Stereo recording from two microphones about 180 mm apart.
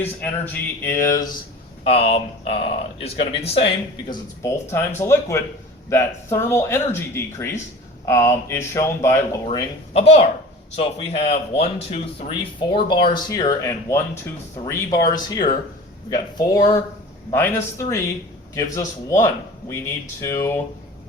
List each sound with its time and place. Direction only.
0.0 s speech: 10° left (ahead or behind)
1.8 s speech: 35° left (ahead or behind)
4.4 s speech: 15° left (ahead or behind)
9.9 s speech: 35° left (ahead or behind); by 20.6 s 15° left (ahead or behind)